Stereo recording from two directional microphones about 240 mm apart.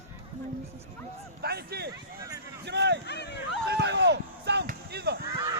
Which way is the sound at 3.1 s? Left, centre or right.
Left.